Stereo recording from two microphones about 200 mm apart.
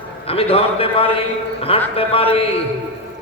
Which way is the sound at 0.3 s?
30° left (ahead or behind).